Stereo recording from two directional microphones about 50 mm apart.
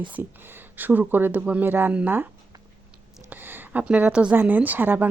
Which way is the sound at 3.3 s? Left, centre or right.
Right.